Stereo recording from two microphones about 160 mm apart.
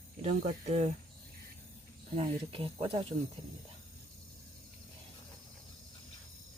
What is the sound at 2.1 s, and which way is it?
Speech, 40° right (ahead or behind).